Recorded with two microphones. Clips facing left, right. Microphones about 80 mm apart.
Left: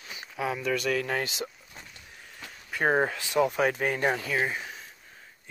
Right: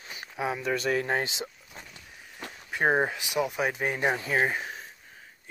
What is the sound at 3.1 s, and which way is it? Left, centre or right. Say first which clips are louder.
Speech: left 4 dB; centre.